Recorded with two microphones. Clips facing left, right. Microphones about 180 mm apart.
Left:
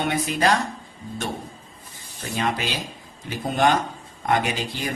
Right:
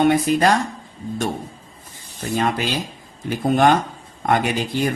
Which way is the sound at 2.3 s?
45° right (ahead or behind).